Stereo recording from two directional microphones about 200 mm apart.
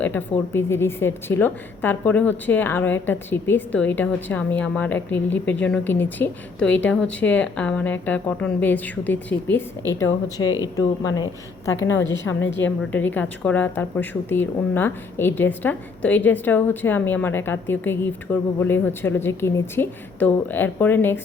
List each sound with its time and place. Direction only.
0.0 s speech: 10° left (ahead or behind)
12.0 s a woman's voice: 65° left (ahead or behind)
12.9 s speech: 10° left (ahead or behind)